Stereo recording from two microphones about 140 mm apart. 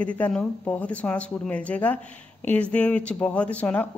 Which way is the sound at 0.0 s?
10° left (ahead or behind).